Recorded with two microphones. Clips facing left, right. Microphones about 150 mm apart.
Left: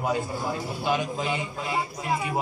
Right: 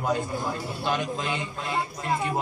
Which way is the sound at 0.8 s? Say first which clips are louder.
Left 1 dB; 10° left (ahead or behind).